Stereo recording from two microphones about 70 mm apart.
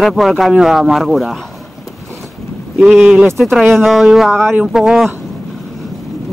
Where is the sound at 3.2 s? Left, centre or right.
Centre.